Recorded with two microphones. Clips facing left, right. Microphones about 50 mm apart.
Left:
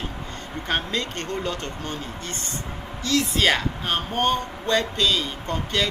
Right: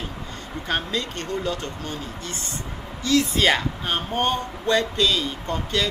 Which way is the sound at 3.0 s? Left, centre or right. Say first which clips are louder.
Right 2 dB; right.